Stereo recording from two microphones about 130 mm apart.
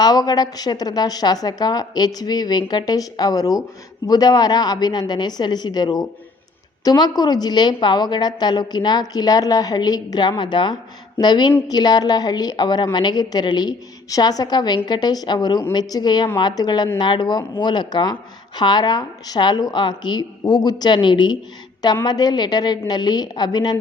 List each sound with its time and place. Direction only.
0.0 s a woman's voice: 30° left (ahead or behind)